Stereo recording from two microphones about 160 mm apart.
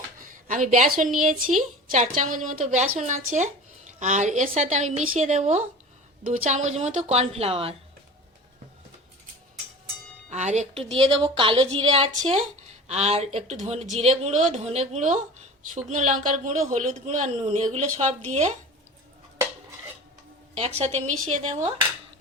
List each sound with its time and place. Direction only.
0.2 s a woman's voice: 55° right (ahead or behind); by 7.8 s 40° right (ahead or behind)
10.2 s a woman's voice: 45° right (ahead or behind)
20.6 s a woman's voice: 40° right (ahead or behind)